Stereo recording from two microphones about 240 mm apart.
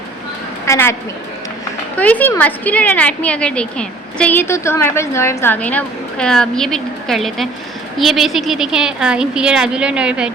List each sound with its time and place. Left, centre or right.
0.6 s a woman's voice: centre
2.0 s a woman's voice: centre